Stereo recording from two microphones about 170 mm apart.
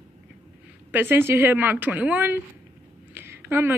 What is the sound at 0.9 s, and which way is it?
A woman's voice, 15° right (ahead or behind).